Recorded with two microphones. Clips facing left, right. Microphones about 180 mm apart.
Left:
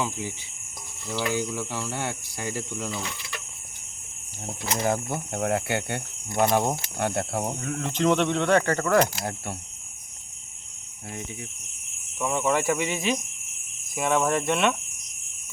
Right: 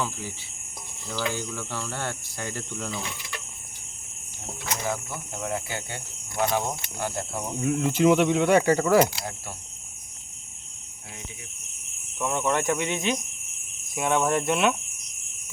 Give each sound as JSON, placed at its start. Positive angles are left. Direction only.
{"t": 0.0, "sound": "speech", "side_deg": 15}
{"t": 4.8, "sound": "speech", "side_deg": 55}
{"t": 6.4, "sound": "speech", "side_deg": 50}
{"t": 7.6, "sound": "speech", "side_deg": -10}
{"t": 12.2, "sound": "speech", "side_deg": 0}